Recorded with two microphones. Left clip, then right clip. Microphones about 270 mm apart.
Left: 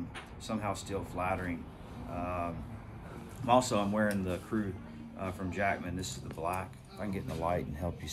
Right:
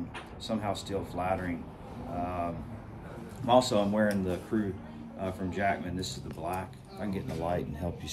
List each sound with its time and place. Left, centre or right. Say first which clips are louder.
0.5 s speech: right 3 dB; centre